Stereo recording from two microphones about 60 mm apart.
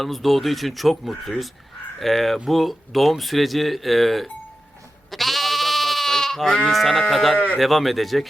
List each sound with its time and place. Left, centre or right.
0.0 s speech: centre
5.1 s goat: centre
6.7 s speech: centre